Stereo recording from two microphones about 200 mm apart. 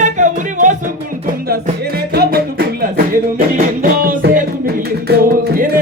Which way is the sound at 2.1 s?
50° right (ahead or behind).